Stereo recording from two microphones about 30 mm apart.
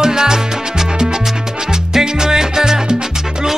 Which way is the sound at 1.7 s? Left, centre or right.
Centre.